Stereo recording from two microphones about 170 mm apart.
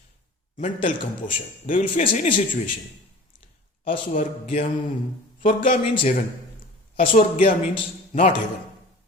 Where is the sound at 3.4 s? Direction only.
30° left (ahead or behind).